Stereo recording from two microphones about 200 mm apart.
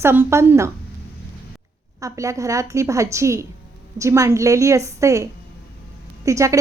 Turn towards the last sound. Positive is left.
turn(degrees=-15)  # may be behind; listen again after turning